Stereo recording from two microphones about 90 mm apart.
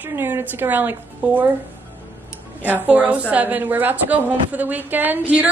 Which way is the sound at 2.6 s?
20° right (ahead or behind).